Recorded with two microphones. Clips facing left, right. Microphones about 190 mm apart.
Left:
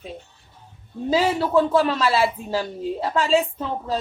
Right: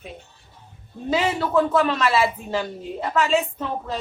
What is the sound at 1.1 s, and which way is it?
Speech, 30° left (ahead or behind).